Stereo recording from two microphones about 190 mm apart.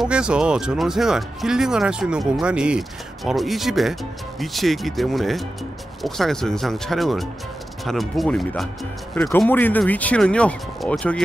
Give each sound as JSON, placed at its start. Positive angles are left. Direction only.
{"t": 0.0, "sound": "speech", "side_deg": -5}